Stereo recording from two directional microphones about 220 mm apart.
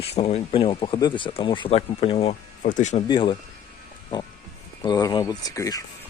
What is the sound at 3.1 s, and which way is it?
Speech, 20° left (ahead or behind).